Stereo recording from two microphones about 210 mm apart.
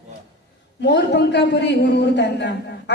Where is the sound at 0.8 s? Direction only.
55° left (ahead or behind).